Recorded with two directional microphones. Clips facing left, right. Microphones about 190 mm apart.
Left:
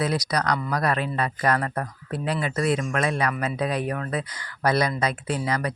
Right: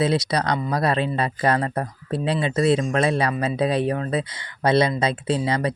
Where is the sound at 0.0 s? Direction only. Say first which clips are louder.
Right 4 dB; 25° right (ahead or behind).